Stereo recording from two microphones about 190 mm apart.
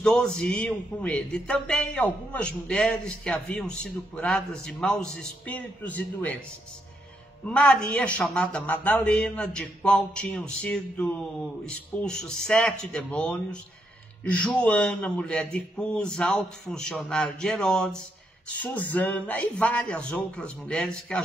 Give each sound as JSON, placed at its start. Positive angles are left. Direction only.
{"t": 0.0, "sound": "a man's voice", "side_deg": 5}
{"t": 7.4, "sound": "a man's voice", "side_deg": 5}